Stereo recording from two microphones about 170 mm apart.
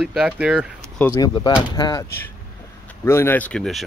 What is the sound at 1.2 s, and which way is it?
Speech, 25° left (ahead or behind).